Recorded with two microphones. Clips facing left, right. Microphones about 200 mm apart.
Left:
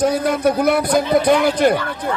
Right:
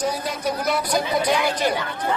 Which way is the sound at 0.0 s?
55° left (ahead or behind).